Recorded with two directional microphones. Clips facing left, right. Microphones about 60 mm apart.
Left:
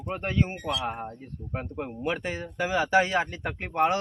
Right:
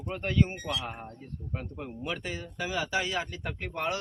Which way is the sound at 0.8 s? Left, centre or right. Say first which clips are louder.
Left 7 dB; left.